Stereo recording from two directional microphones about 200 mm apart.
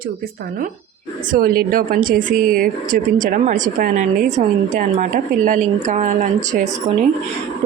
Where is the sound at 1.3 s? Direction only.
45° right (ahead or behind).